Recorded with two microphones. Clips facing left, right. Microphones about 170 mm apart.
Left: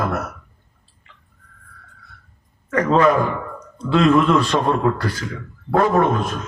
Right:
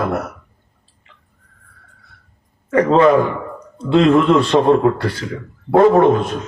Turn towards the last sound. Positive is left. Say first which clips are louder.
# right 6 dB
turn(degrees=-25)  # may be behind; listen again after turning